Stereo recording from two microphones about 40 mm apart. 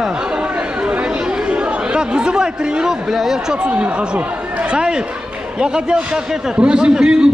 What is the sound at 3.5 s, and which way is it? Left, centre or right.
A man's voice, right.